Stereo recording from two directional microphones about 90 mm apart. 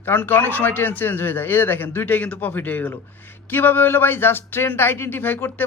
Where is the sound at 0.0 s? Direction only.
20° left (ahead or behind).